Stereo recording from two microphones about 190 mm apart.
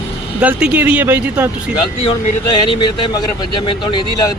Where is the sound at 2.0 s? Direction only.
25° left (ahead or behind).